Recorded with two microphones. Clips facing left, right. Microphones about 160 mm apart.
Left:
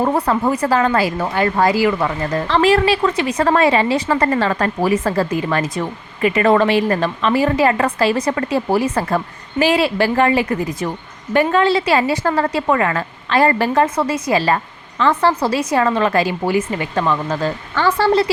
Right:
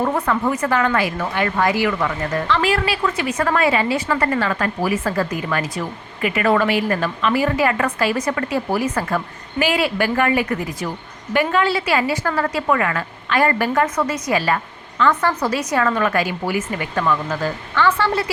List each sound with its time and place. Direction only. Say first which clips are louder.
0.0 s a woman's voice: left 3 dB; 30° left (ahead or behind)
17.7 s a woman's voice: left 4 dB; 35° left (ahead or behind)